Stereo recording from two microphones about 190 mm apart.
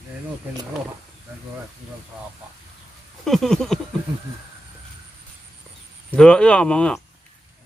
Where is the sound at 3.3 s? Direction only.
Centre (ahead or behind).